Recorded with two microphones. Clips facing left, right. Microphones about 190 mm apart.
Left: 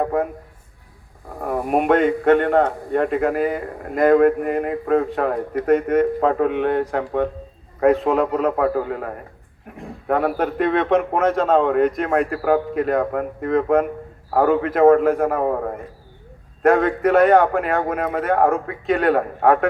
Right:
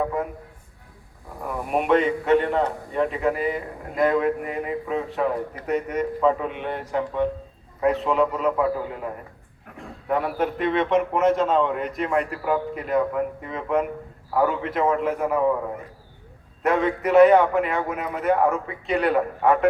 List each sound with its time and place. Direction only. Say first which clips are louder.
0.0 s a man's voice: left 5 dB; 50° left (ahead or behind)
1.4 s a man's voice: left 5 dB; 50° left (ahead or behind)